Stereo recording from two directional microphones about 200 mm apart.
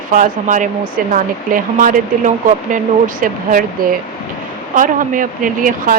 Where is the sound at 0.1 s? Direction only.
40° right (ahead or behind).